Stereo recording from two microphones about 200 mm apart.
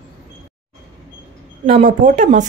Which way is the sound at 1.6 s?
40° right (ahead or behind).